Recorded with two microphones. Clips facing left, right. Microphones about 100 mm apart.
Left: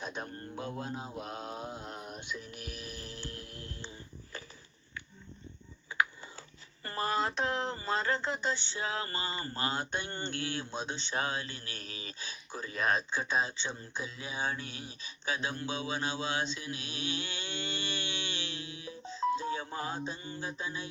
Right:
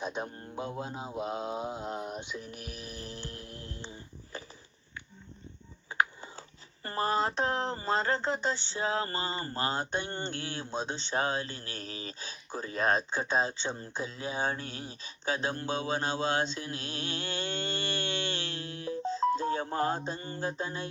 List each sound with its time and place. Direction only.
0.0 s mantra: 20° right (ahead or behind)
5.9 s a sound: 35° right (ahead or behind)
6.8 s speech: 30° right (ahead or behind); by 20.0 s 45° right (ahead or behind)
20.1 s mantra: 50° right (ahead or behind)